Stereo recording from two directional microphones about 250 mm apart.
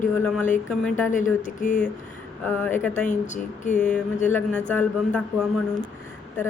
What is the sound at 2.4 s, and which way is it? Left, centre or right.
Speech, centre.